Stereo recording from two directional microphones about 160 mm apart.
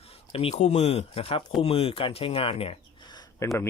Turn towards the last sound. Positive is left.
turn(degrees=25)  # may be behind; listen again after turning